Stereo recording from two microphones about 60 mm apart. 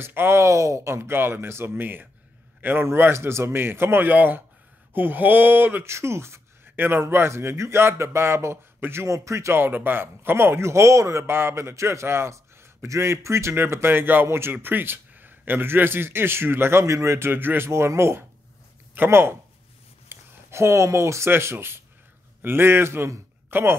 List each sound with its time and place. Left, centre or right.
0.0 s speech: right
0.4 s a man's voice: right
5.9 s a man's voice: right
9.5 s a man's voice: right
16.8 s speech: right
17.3 s speech: right
17.6 s a man's voice: right
20.1 s a sound: right
21.3 s a man's voice: right
23.5 s speech: right